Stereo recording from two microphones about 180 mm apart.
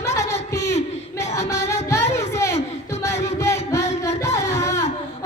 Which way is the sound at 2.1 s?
15° left (ahead or behind).